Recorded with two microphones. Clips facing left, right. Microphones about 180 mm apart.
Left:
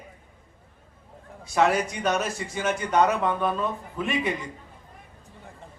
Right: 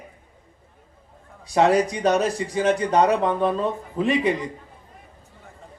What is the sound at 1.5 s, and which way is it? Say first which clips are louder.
A man's voice: right 4 dB; 35° right (ahead or behind).